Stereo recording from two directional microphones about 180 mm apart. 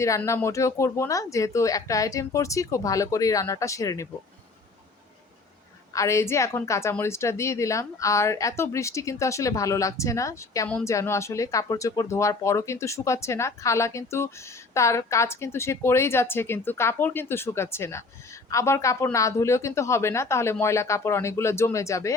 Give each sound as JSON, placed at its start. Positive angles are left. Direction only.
{"t": 0.0, "sound": "speech", "side_deg": 15}
{"t": 5.9, "sound": "speech", "side_deg": 15}